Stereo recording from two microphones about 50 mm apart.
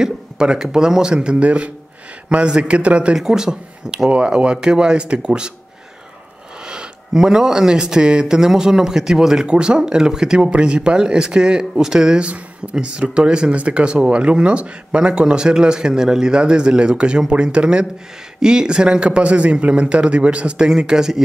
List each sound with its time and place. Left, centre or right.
0.0 s a man's voice: centre
3.2 s speech: centre
4.1 s speech: right
6.6 s speech: centre